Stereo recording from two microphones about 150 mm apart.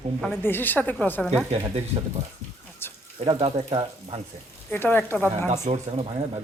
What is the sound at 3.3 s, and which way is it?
Speech, 35° right (ahead or behind).